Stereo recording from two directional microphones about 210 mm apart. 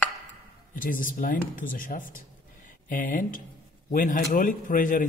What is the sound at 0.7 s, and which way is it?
A man's voice, 40° left (ahead or behind).